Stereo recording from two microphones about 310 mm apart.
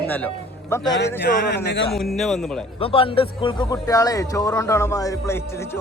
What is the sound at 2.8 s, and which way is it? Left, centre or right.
Speech, centre.